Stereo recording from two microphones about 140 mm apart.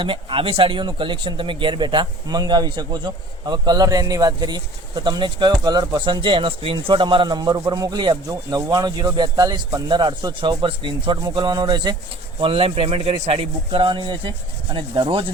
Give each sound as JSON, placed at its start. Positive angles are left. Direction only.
{"t": 0.0, "sound": "speech", "side_deg": -35}